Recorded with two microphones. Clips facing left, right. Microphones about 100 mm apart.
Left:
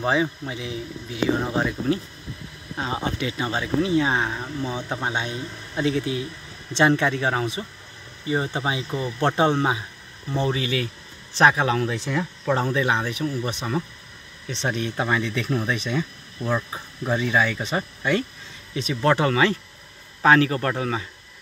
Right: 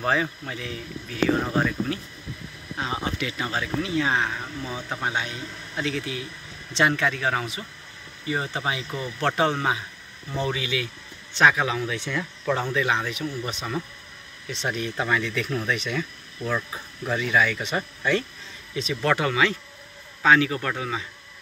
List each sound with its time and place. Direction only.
0.0 s speech: 15° left (ahead or behind); by 12.3 s 45° left (ahead or behind)
12.5 s speech: 35° left (ahead or behind)
18.9 s speech: 30° left (ahead or behind)